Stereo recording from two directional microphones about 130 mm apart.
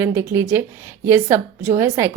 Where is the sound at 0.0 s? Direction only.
15° right (ahead or behind).